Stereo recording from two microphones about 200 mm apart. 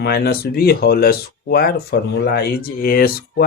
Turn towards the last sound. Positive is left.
turn(degrees=50)  # may be behind; listen again after turning